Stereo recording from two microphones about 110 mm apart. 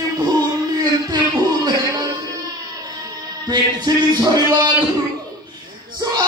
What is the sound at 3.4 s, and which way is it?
Speech, 40° right (ahead or behind).